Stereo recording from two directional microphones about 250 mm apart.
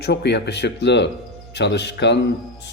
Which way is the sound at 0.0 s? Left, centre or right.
Left.